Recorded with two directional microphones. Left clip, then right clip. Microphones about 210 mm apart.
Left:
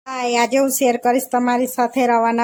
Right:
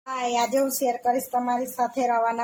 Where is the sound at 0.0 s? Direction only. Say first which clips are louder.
Left 6 dB; 30° left (ahead or behind).